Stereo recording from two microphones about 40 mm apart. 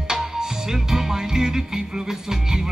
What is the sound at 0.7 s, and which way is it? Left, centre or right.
Music, centre.